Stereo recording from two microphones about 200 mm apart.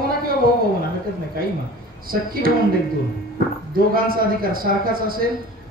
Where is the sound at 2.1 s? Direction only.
45° right (ahead or behind).